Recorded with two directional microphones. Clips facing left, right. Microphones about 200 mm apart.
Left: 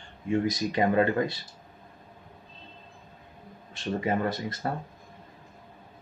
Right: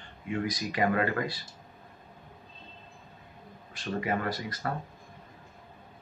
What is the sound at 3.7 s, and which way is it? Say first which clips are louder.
Speech: left 3 dB; 25° left (ahead or behind).